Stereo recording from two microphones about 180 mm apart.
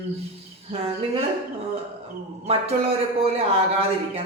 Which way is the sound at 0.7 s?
35° right (ahead or behind).